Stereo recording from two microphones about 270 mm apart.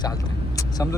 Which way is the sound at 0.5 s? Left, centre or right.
Centre.